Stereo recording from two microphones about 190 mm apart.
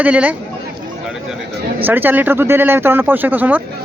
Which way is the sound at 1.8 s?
10° right (ahead or behind).